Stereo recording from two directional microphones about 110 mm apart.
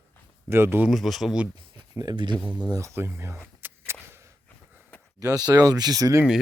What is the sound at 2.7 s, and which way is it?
Speech, 25° right (ahead or behind).